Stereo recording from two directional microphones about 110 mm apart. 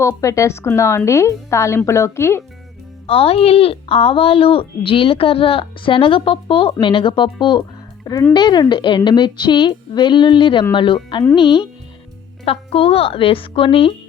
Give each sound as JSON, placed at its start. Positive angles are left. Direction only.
{"t": 0.0, "sound": "a woman's voice", "side_deg": 30}
{"t": 3.1, "sound": "a woman's voice", "side_deg": 60}
{"t": 12.5, "sound": "speech", "side_deg": 60}